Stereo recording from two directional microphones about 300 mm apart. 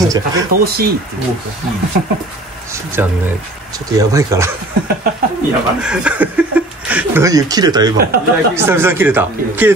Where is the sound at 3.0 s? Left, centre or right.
Centre.